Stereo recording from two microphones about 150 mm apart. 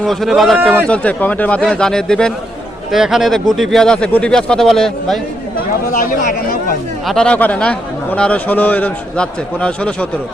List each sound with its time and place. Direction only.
0.0 s a man's voice: centre (ahead or behind)
5.9 s speech: 60° left (ahead or behind)
7.1 s a man's voice: 5° left (ahead or behind)